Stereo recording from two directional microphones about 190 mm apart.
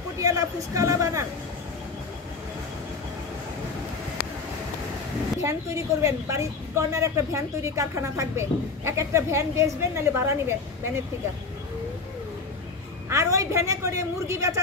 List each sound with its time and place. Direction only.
0.2 s speech: 20° right (ahead or behind)
5.4 s a woman's voice: 15° right (ahead or behind)
13.1 s a woman's voice: 15° right (ahead or behind)